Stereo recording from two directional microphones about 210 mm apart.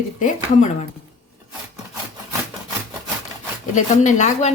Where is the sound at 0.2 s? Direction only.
35° left (ahead or behind).